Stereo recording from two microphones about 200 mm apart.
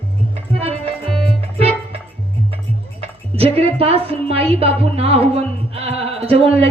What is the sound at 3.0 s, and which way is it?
A woman's voice, 30° right (ahead or behind).